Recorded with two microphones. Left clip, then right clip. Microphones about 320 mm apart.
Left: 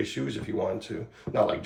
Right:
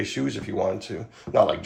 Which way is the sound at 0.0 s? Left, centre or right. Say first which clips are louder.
Right 3 dB; right.